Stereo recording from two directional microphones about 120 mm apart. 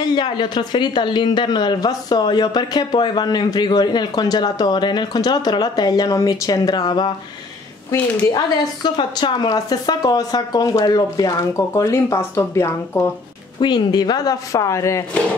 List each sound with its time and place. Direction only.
0.1 s speech: 40° left (ahead or behind)
8.3 s speech: 35° left (ahead or behind)
13.6 s speech: 40° left (ahead or behind)